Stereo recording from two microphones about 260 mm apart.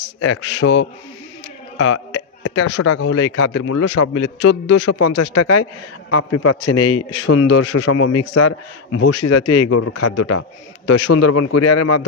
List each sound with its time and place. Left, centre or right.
0.2 s speech: left
1.8 s a sound: left
3.0 s speech: left
3.7 s a man's voice: left
4.8 s a man's voice: left